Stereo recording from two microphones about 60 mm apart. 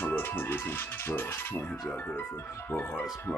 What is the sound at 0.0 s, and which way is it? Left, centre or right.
Speech, left.